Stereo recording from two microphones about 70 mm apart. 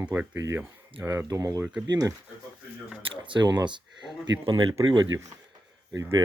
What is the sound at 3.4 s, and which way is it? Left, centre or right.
Speech, right.